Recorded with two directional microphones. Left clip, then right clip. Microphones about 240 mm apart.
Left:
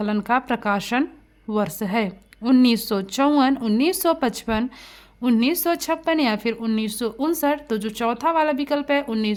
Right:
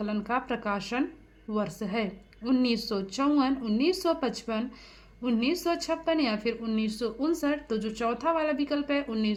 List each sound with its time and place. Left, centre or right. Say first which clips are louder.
0.0 s a woman's voice: left 9 dB; left